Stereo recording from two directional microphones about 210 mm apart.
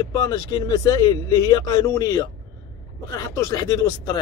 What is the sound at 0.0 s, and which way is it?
Speech, 20° left (ahead or behind).